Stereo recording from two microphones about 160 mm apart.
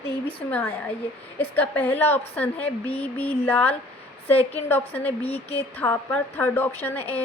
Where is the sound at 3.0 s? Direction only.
10° left (ahead or behind).